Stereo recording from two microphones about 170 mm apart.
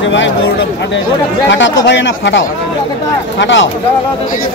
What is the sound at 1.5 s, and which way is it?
Speech, 90° left.